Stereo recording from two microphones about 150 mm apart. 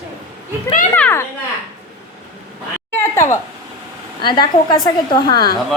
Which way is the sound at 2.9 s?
15° left (ahead or behind).